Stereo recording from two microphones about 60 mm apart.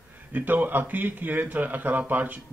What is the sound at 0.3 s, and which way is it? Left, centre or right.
Speech, right.